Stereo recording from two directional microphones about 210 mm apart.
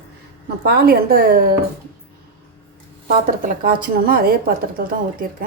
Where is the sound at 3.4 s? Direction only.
45° right (ahead or behind).